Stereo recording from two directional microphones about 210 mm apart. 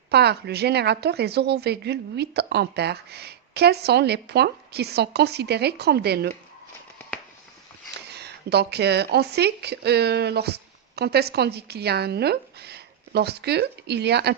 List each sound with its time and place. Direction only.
0.1 s a woman's voice: 50° right (ahead or behind)
8.0 s speech: 50° right (ahead or behind)